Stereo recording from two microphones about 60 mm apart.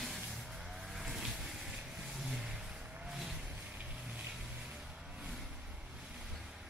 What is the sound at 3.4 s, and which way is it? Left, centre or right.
Vehicle, centre.